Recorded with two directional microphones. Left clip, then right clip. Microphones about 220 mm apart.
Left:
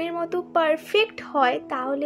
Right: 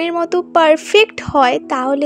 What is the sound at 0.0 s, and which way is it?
A woman's voice, 40° right (ahead or behind).